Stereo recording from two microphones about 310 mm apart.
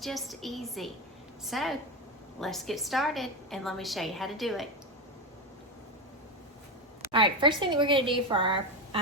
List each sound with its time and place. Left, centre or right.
0.0 s a woman's voice: centre
7.1 s speech: centre